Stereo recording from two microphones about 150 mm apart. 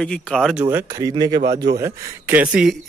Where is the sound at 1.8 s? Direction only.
10° right (ahead or behind).